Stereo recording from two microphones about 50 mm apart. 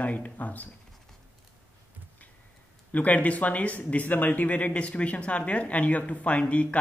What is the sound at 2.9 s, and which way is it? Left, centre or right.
Speech, left.